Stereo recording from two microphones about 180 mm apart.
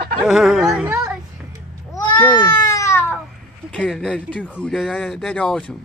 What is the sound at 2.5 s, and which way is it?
Baby cry, 20° left (ahead or behind).